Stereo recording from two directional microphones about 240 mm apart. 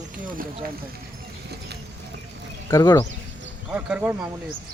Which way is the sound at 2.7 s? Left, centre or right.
Centre.